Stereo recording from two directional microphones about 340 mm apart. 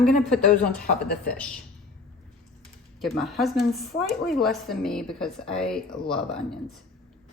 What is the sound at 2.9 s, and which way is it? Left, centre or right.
Speech, centre.